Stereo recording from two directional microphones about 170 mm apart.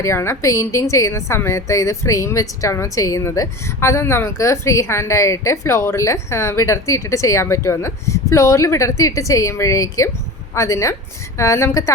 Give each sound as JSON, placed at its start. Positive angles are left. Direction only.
{"t": 0.0, "sound": "a woman's voice", "side_deg": 15}